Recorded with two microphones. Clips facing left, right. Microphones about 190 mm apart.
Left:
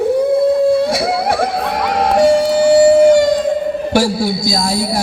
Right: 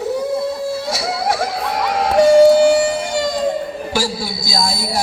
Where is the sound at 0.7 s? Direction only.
55° left (ahead or behind).